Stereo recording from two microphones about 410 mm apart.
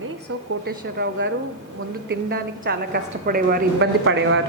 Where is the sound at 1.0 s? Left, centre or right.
Right.